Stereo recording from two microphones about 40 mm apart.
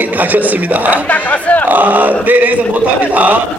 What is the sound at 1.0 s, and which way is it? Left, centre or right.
Speech, left.